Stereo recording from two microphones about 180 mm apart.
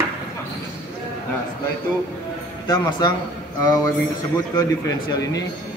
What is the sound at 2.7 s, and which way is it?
Speech, 20° left (ahead or behind).